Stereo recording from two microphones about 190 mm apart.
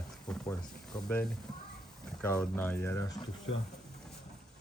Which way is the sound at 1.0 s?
5° left (ahead or behind).